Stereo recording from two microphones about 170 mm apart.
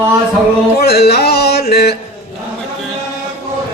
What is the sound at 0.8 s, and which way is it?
Music, 70° left (ahead or behind).